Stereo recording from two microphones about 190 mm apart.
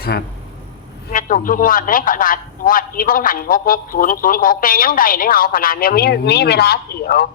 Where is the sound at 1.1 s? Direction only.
45° left (ahead or behind).